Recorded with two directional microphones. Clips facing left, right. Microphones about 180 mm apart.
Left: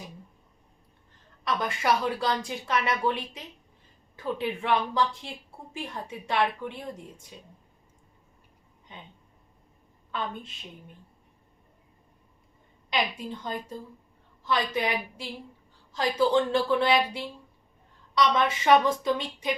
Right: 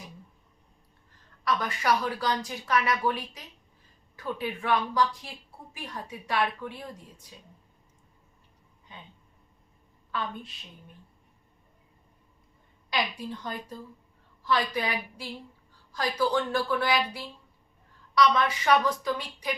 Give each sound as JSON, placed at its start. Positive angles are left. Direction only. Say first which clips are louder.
{"t": 1.5, "sound": "speech", "louder": "even", "side_deg": 25}
{"t": 10.1, "sound": "a woman's voice", "louder": "left 1 dB", "side_deg": 25}
{"t": 12.9, "sound": "speech", "louder": "left 1 dB", "side_deg": 25}